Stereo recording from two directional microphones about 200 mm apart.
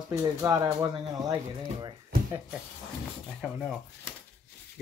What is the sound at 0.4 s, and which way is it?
Speech, 15° right (ahead or behind).